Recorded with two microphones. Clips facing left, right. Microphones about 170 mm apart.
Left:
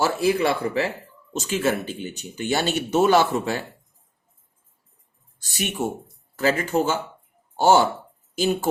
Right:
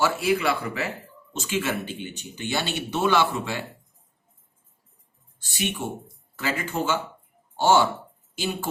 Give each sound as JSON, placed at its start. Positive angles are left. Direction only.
{"t": 0.0, "sound": "speech", "side_deg": 35}
{"t": 5.4, "sound": "speech", "side_deg": 40}